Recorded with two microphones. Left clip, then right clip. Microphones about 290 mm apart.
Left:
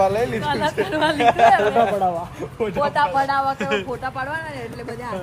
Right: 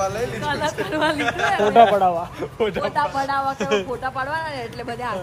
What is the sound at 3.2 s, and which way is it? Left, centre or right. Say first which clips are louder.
Speech: left 2 dB; centre.